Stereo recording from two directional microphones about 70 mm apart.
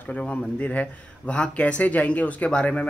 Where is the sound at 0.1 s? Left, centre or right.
Centre.